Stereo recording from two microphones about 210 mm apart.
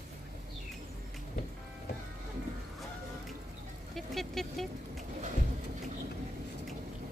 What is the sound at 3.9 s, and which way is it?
Vehicle, centre (ahead or behind).